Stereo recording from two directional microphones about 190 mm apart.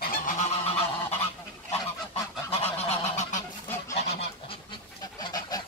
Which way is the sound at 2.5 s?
30° left (ahead or behind).